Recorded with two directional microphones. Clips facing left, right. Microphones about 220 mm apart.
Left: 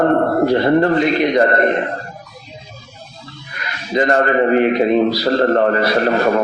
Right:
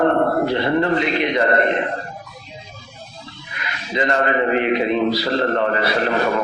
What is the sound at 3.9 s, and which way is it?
A man's voice, 45° left (ahead or behind).